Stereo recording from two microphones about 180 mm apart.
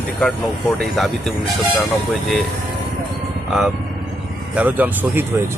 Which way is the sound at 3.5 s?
5° right (ahead or behind).